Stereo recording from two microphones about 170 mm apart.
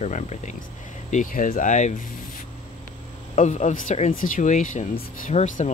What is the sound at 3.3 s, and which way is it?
Speech, 45° left (ahead or behind).